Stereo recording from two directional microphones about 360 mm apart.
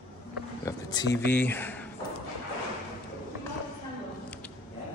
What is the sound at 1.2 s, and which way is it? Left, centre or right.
Speech, centre.